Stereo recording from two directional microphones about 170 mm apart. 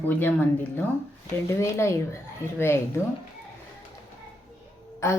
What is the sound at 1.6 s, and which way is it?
Speech, 15° left (ahead or behind).